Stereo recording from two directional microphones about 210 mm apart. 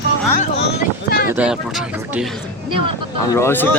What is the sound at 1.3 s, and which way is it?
Speech, 5° right (ahead or behind).